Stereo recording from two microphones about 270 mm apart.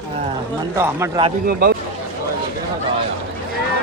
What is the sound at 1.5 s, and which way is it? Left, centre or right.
Speech, right.